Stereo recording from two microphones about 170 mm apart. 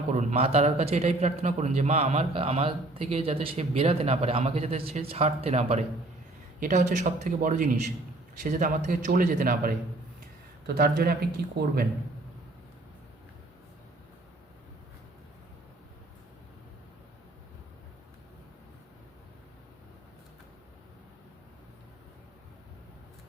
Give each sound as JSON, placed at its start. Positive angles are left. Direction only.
{"t": 0.1, "sound": "a man's voice", "side_deg": -45}
{"t": 10.8, "sound": "speech", "side_deg": -65}